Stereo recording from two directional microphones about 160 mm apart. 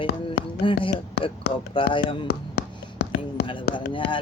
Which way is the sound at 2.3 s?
90° left.